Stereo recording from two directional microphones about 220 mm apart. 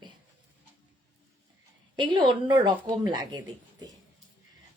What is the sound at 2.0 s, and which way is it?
A woman's voice, 20° right (ahead or behind).